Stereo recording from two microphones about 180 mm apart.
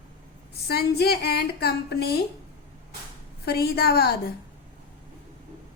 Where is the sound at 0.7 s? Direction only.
60° left (ahead or behind).